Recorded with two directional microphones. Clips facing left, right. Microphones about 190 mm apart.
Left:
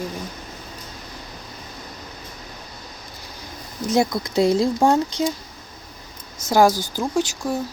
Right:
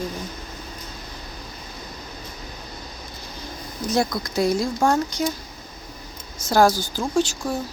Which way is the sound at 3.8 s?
25° left (ahead or behind).